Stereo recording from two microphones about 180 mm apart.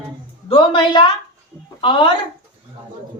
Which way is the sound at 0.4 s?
30° left (ahead or behind).